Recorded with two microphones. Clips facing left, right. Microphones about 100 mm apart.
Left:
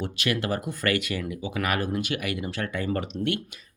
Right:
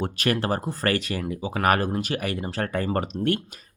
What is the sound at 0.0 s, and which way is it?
Speech, 40° right (ahead or behind).